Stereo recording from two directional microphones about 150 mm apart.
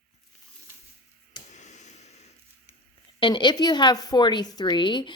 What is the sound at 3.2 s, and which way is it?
A woman's voice, 30° left (ahead or behind).